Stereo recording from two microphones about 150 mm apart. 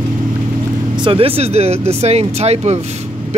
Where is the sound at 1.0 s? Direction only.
35° right (ahead or behind).